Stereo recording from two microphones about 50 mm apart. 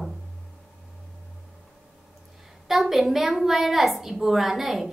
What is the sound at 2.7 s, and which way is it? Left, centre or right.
A woman's voice, centre.